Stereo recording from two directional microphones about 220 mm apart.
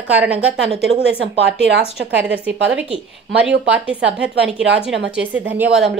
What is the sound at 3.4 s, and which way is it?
Speech, 5° right (ahead or behind).